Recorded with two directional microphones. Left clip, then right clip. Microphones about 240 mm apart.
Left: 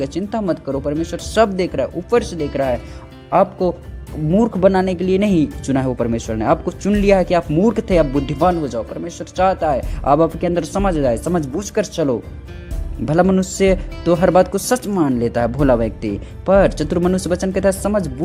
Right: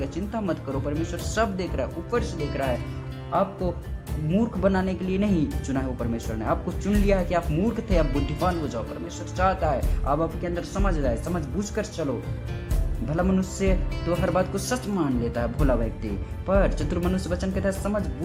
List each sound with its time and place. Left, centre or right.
0.0 s speech: left
4.3 s speech: left
8.0 s speech: centre
8.6 s speech: left
13.1 s speech: left